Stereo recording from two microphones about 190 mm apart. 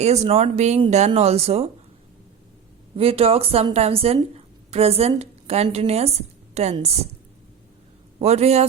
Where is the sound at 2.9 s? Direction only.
30° right (ahead or behind).